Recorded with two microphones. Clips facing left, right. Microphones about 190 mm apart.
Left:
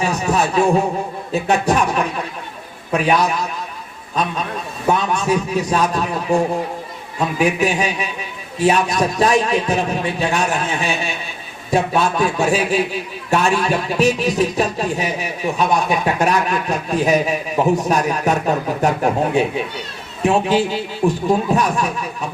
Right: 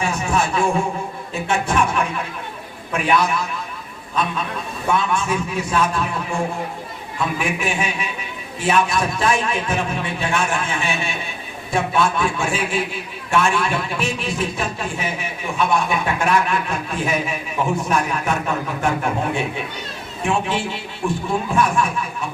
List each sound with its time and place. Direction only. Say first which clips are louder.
0.0 s a man's voice: left 3 dB; 40° left (ahead or behind)